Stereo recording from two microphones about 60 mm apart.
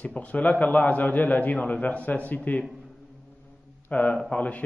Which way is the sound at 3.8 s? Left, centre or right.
Left.